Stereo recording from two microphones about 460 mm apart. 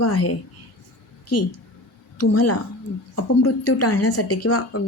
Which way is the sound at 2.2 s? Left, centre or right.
Left.